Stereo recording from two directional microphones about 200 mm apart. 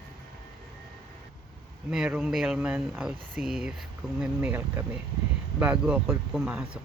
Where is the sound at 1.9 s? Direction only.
5° right (ahead or behind).